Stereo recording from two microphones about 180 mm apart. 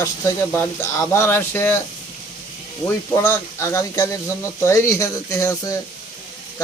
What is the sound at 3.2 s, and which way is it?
Speech, 15° left (ahead or behind).